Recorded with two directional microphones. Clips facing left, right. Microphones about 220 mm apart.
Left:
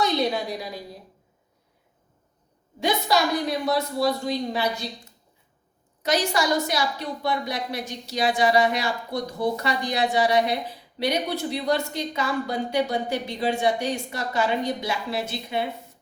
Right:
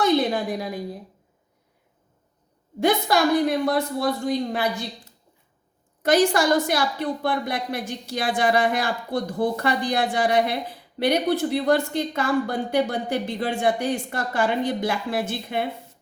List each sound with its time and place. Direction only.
0.0 s a sound: 50° right (ahead or behind)
3.1 s a woman's voice: 50° right (ahead or behind)
6.0 s a woman's voice: 55° right (ahead or behind)